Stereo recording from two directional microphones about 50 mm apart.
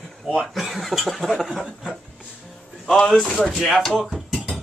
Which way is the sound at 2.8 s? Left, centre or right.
Centre.